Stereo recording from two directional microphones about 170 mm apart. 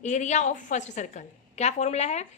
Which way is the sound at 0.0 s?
45° left (ahead or behind).